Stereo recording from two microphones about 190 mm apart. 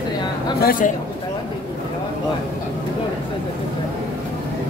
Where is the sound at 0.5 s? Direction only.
50° left (ahead or behind).